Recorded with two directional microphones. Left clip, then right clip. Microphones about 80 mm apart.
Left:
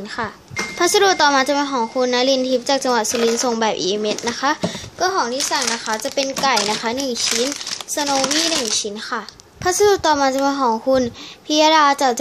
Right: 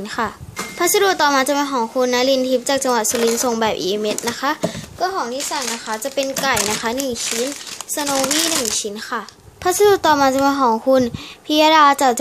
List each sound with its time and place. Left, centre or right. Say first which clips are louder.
0.7 s a woman's voice: left 1 dB; centre
5.0 s a child's voice: left 2 dB; left
6.0 s speech: right 3 dB; centre
6.4 s speech: left 2 dB; centre
9.7 s speech: right 1 dB; right